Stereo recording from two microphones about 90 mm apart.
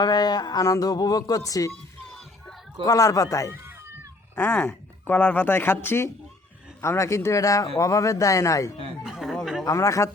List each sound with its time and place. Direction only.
0.0 s speech: 50° left (ahead or behind)
2.8 s speech: 40° left (ahead or behind)
3.5 s cat: 25° right (ahead or behind)
4.6 s speech: 20° left (ahead or behind); by 8.7 s 35° left (ahead or behind)
9.0 s a sound: 5° right (ahead or behind)
9.6 s speech: 35° left (ahead or behind)